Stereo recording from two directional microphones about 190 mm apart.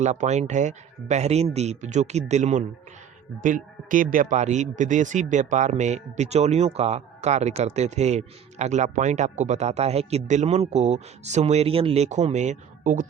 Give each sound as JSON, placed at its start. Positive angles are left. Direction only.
{"t": 0.0, "sound": "speech", "side_deg": -35}